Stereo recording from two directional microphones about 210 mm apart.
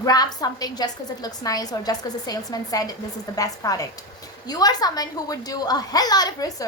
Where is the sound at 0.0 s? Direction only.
20° left (ahead or behind).